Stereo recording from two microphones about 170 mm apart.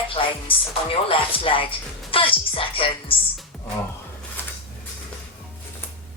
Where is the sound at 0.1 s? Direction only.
30° left (ahead or behind).